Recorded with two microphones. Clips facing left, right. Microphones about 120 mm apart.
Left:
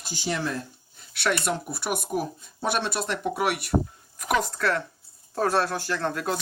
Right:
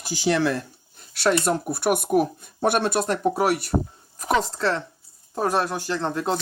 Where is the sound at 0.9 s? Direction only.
40° right (ahead or behind).